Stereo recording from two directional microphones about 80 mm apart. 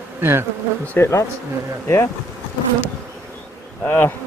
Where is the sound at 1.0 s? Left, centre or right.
Left.